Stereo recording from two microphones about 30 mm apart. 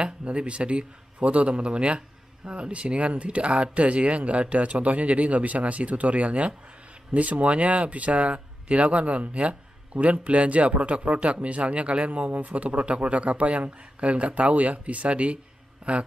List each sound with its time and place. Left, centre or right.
0.0 s a man's voice: right
12.1 s a man's voice: right
15.8 s speech: right